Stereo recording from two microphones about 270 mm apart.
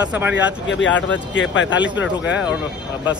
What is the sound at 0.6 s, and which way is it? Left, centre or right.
Speech, left.